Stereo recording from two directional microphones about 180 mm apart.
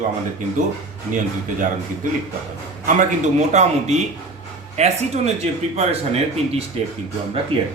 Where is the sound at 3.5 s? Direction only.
40° right (ahead or behind).